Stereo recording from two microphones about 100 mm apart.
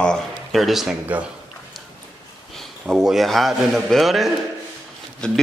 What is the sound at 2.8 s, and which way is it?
A man's voice, 5° right (ahead or behind).